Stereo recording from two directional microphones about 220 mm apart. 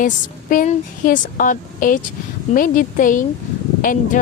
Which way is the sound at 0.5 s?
35° left (ahead or behind).